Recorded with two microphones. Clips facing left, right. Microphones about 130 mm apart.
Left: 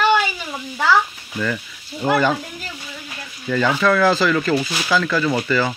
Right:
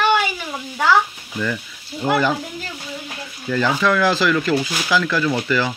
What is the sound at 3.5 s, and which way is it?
Speech, 5° right (ahead or behind).